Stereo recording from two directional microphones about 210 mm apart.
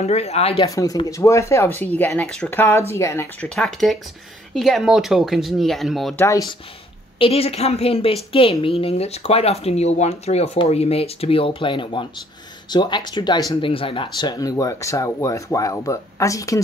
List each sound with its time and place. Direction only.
0.0 s speech: 30° left (ahead or behind)
0.7 s speech: 15° left (ahead or behind); by 6.2 s centre (ahead or behind)
6.2 s speech: 15° left (ahead or behind)
7.2 s a woman's voice: 25° left (ahead or behind)